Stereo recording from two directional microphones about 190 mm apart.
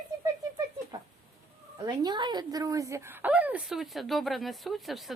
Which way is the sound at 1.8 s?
20° right (ahead or behind).